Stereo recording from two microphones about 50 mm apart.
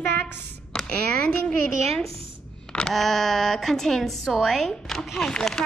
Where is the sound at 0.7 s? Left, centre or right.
Centre.